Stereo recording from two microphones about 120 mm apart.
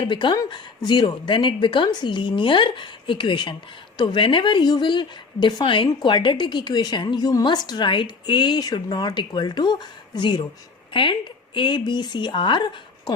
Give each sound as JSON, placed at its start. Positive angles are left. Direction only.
{"t": 0.0, "sound": "a woman's voice", "side_deg": 40}